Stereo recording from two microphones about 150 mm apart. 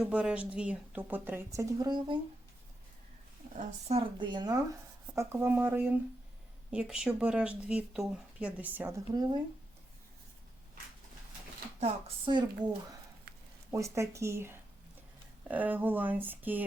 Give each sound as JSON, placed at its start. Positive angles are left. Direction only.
{"t": 0.0, "sound": "speech", "side_deg": -5}
{"t": 3.6, "sound": "speech", "side_deg": -45}
{"t": 4.2, "sound": "speech", "side_deg": -30}
{"t": 5.3, "sound": "speech", "side_deg": -15}
{"t": 11.8, "sound": "a woman's voice", "side_deg": -40}
{"t": 13.3, "sound": "a sound", "side_deg": -90}
{"t": 13.7, "sound": "speech", "side_deg": -20}